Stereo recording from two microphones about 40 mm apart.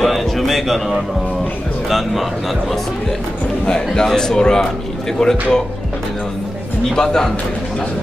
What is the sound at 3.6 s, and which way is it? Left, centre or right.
Speech, centre.